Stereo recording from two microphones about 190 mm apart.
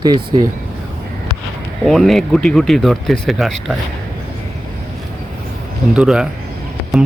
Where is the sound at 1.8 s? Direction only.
Centre (ahead or behind).